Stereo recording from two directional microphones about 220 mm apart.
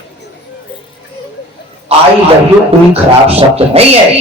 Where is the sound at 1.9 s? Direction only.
25° right (ahead or behind).